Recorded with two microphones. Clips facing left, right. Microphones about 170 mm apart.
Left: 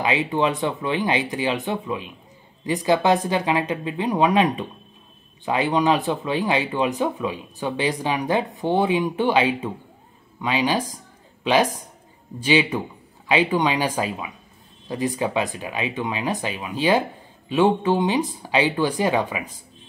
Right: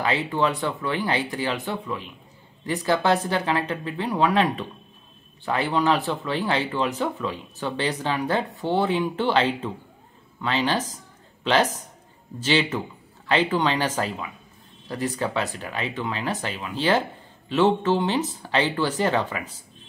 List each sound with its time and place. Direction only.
0.0 s speech: 15° left (ahead or behind)